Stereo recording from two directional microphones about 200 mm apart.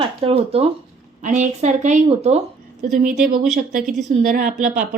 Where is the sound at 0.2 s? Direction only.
30° right (ahead or behind).